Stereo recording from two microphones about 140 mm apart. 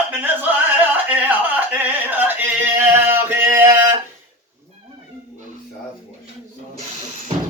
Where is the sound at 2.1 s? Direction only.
10° right (ahead or behind).